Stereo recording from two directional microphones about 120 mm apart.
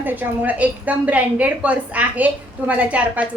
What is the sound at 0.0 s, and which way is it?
A woman's voice, 15° right (ahead or behind).